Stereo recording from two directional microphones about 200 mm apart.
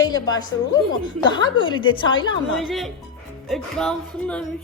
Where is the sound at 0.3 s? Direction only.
20° left (ahead or behind).